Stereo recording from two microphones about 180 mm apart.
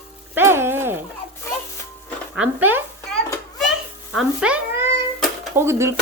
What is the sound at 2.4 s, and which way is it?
Speech, 10° right (ahead or behind).